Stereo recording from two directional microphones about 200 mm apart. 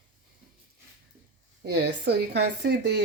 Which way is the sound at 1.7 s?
60° right (ahead or behind).